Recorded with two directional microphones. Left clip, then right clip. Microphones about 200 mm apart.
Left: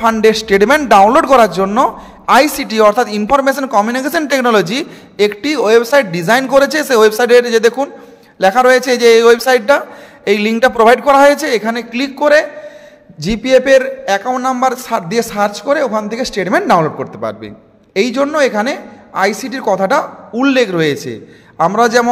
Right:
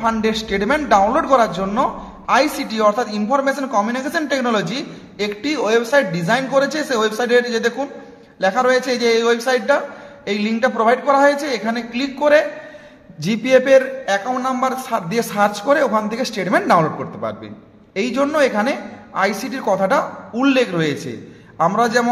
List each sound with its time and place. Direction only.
0.0 s a man's voice: 45° left (ahead or behind)
13.2 s a man's voice: 20° left (ahead or behind)
14.0 s a man's voice: 45° left (ahead or behind)